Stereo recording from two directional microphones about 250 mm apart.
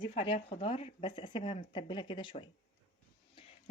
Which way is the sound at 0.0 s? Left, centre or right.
Left.